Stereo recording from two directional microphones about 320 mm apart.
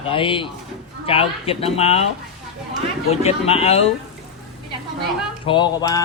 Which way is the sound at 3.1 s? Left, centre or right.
Centre.